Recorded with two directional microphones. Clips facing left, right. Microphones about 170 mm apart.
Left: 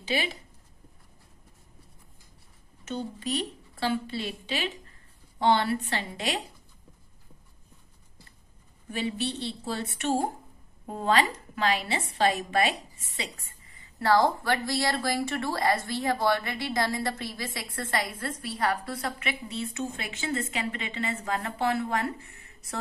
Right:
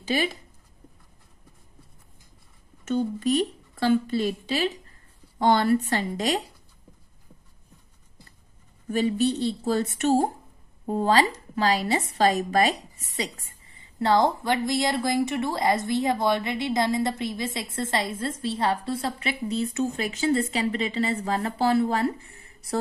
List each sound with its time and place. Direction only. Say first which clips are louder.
0.0 s speech: right 4 dB; 45° right (ahead or behind)
2.8 s speech: right 8 dB; 45° right (ahead or behind)
8.9 s a woman's voice: right 8 dB; 45° right (ahead or behind)